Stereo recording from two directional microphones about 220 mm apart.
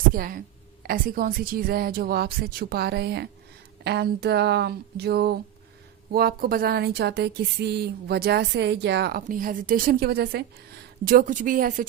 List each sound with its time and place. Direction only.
0.1 s speech: 40° right (ahead or behind)